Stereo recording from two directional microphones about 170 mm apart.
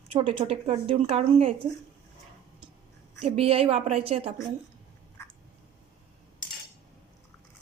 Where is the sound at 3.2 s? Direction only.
35° right (ahead or behind).